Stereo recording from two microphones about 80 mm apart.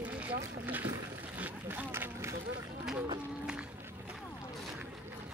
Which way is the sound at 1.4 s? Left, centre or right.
Centre.